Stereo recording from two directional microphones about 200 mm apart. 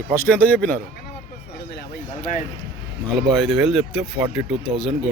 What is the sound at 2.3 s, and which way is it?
Speech, 35° left (ahead or behind).